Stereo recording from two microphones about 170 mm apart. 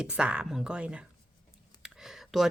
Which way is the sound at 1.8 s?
Centre (ahead or behind).